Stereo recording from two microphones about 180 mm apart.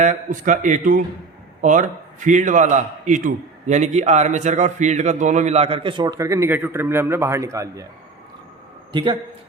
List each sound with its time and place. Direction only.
0.0 s a man's voice: 45° right (ahead or behind); by 7.9 s 15° right (ahead or behind)
8.9 s a man's voice: 25° right (ahead or behind)